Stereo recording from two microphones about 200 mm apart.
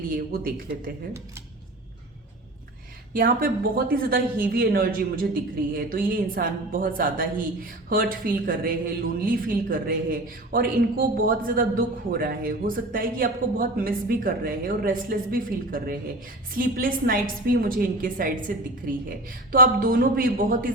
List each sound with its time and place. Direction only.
0.1 s a man's voice: 45° right (ahead or behind)
3.1 s a man's voice: 45° right (ahead or behind)